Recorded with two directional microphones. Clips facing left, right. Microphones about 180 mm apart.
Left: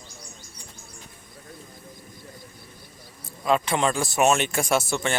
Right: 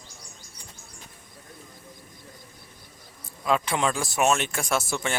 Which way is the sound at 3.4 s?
Centre (ahead or behind).